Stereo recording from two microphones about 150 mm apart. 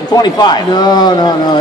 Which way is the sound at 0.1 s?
30° left (ahead or behind).